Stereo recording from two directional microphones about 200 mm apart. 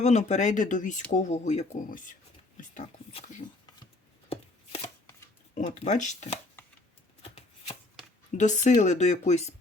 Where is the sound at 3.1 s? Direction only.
30° left (ahead or behind).